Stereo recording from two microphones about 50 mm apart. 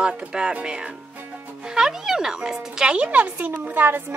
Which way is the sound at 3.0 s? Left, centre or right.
Right.